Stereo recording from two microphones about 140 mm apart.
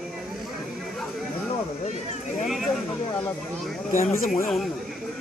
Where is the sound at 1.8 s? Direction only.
55° left (ahead or behind).